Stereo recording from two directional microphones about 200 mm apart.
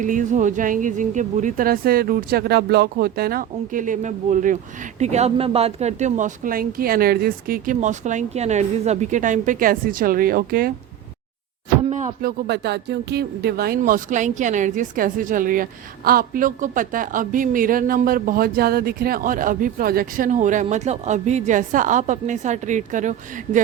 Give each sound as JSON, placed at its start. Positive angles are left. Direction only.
{"t": 0.0, "sound": "speech", "side_deg": -40}
{"t": 11.9, "sound": "a sound", "side_deg": -35}
{"t": 12.5, "sound": "speech", "side_deg": -55}